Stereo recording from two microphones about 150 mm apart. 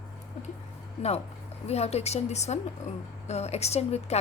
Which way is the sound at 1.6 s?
45° left (ahead or behind).